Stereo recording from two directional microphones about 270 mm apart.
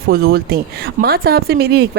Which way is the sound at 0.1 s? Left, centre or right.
Right.